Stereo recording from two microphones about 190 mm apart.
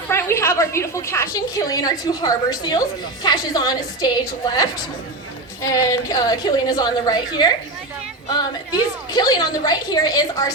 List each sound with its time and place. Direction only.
0.1 s a woman's voice: 15° left (ahead or behind)
9.1 s a woman's voice: 20° left (ahead or behind)